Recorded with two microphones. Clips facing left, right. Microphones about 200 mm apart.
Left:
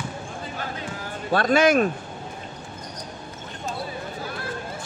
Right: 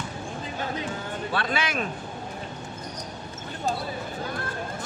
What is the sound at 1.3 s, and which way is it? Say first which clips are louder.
Speech: left 11 dB; 45° left (ahead or behind).